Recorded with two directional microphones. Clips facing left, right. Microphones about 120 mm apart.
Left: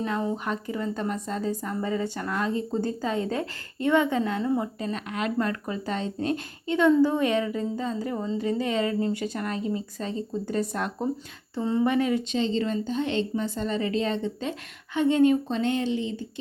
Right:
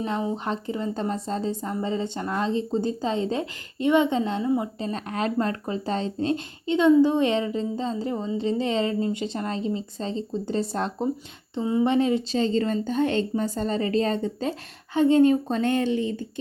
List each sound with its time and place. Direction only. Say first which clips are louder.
0.4 s speech: right 1 dB; 25° right (ahead or behind)
4.8 s speech: right 2 dB; 35° right (ahead or behind)
11.5 s speech: right 2 dB; 10° right (ahead or behind)
11.9 s speech: right 2 dB; 25° right (ahead or behind)
12.4 s a woman's voice: right 2 dB; 45° right (ahead or behind)